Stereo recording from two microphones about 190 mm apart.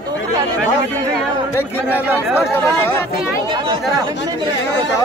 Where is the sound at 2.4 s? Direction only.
15° left (ahead or behind).